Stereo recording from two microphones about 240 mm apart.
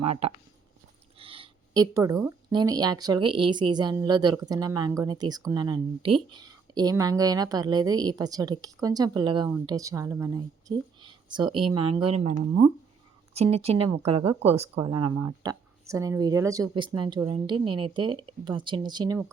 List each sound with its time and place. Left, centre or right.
0.0 s speech: right
1.2 s a sound: right
2.5 s speech: centre